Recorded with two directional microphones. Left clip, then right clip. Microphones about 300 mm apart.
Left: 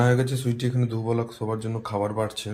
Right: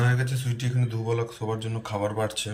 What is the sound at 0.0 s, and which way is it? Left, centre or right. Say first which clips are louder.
Speech: left 6 dB; left.